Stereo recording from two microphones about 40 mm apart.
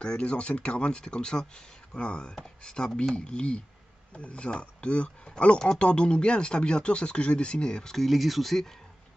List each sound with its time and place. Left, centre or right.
0.0 s speech: left
7.9 s speech: centre